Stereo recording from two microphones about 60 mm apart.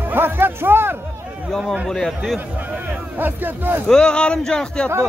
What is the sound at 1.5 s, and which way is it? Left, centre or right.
Speech, centre.